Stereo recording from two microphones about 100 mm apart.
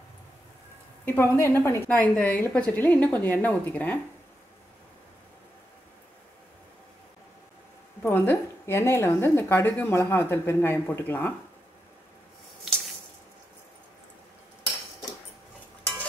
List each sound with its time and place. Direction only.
1.0 s a woman's voice: 20° left (ahead or behind)
8.0 s a woman's voice: 20° left (ahead or behind)